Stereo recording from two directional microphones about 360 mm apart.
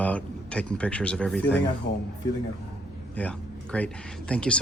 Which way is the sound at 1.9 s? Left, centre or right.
Left.